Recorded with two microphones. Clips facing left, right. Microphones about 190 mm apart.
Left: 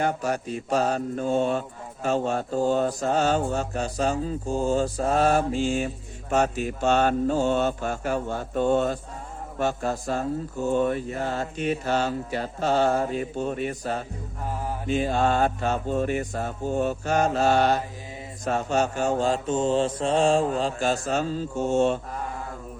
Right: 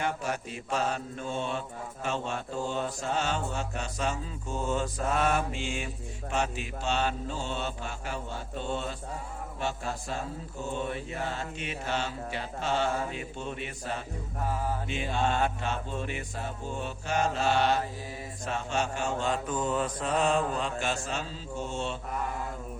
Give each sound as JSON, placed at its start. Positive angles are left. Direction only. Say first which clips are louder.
{"t": 0.0, "sound": "mantra", "louder": "left 6 dB", "side_deg": 40}